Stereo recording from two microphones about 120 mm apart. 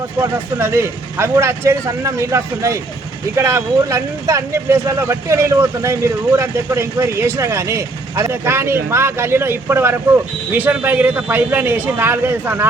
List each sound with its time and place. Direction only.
0.2 s speech: 20° right (ahead or behind)